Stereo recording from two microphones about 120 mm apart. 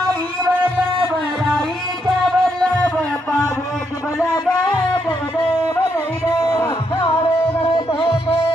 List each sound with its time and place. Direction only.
2.0 s music: 5° left (ahead or behind)
4.4 s music: 5° left (ahead or behind)
6.4 s music: 25° left (ahead or behind)